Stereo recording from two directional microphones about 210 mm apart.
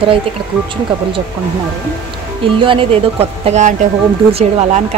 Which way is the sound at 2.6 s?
25° right (ahead or behind).